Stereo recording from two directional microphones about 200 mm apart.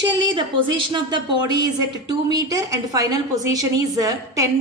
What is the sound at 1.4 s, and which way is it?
A woman's voice, 20° right (ahead or behind).